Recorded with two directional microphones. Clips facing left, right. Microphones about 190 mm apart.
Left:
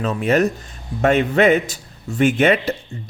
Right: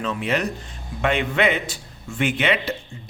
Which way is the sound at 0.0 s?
45° left (ahead or behind).